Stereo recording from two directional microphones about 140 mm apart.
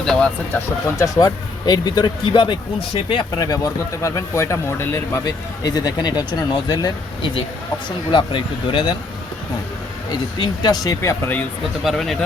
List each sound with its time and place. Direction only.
0.0 s speech: 5° left (ahead or behind)
0.5 s speech: 20° left (ahead or behind)
10.1 s speech: 30° left (ahead or behind)
11.8 s speech: centre (ahead or behind)